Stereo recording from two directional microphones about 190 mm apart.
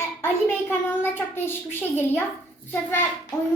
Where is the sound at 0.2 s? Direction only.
10° left (ahead or behind).